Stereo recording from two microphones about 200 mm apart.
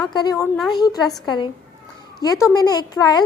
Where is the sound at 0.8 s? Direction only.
20° left (ahead or behind).